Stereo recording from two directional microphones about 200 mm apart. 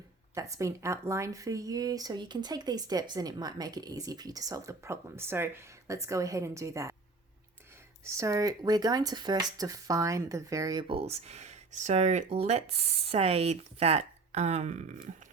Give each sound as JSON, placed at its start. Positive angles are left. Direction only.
{"t": 0.3, "sound": "speech", "side_deg": -15}
{"t": 8.0, "sound": "speech", "side_deg": -15}